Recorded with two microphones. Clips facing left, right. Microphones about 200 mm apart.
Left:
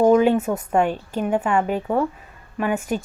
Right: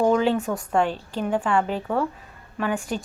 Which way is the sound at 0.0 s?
10° left (ahead or behind).